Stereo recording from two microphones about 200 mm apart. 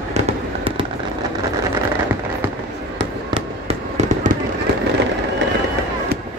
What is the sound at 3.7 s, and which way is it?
Fireworks, 35° right (ahead or behind).